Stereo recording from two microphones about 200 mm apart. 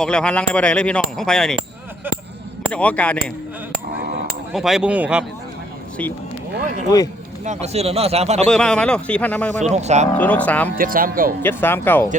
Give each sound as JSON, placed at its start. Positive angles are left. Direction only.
{"t": 0.0, "sound": "speech", "side_deg": 5}
{"t": 2.7, "sound": "speech", "side_deg": 5}
{"t": 4.5, "sound": "speech", "side_deg": 0}
{"t": 7.4, "sound": "speech", "side_deg": -35}
{"t": 8.4, "sound": "speech", "side_deg": 5}
{"t": 9.6, "sound": "speech", "side_deg": -35}
{"t": 10.2, "sound": "speech", "side_deg": 5}
{"t": 10.8, "sound": "speech", "side_deg": -45}
{"t": 11.4, "sound": "speech", "side_deg": 10}